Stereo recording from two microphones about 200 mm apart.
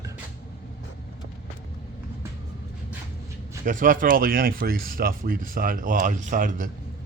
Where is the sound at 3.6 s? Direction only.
45° right (ahead or behind).